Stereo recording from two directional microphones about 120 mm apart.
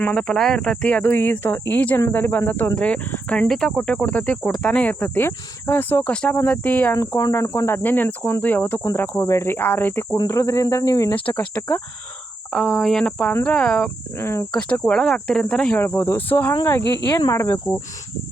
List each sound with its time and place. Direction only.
0.0 s speech: 10° left (ahead or behind)
6.9 s cricket: 25° left (ahead or behind)
11.1 s speech: 15° left (ahead or behind)
12.5 s speech: centre (ahead or behind)
14.2 s cricket: 20° left (ahead or behind)
14.5 s speech: 10° left (ahead or behind)
15.8 s speech: 20° left (ahead or behind)
17.1 s cricket: 30° left (ahead or behind)